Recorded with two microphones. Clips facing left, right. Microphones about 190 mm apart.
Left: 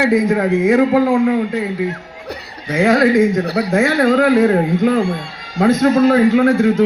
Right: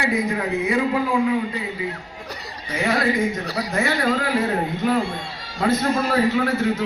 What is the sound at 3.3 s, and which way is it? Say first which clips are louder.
A man's voice: left 9 dB; 60° left (ahead or behind).